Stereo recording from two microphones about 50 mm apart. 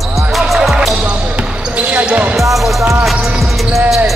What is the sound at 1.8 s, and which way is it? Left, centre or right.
Basketball bounce, right.